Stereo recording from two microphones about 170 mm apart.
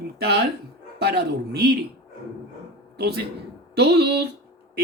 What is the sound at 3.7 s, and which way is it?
Speech, 75° right (ahead or behind).